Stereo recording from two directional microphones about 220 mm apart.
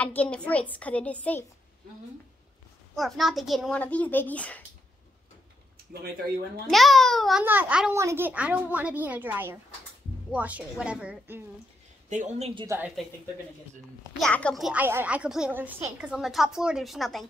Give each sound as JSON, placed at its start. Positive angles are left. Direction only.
{"t": 0.0, "sound": "a woman's voice", "side_deg": 5}
{"t": 3.0, "sound": "a woman's voice", "side_deg": 0}
{"t": 6.7, "sound": "a child's voice", "side_deg": 0}
{"t": 12.1, "sound": "speech", "side_deg": -35}
{"t": 12.6, "sound": "a child's voice", "side_deg": -10}
{"t": 14.2, "sound": "a woman's voice", "side_deg": 5}